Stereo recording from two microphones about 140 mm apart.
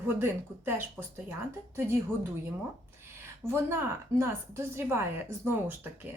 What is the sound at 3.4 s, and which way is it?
A woman's voice, 20° right (ahead or behind).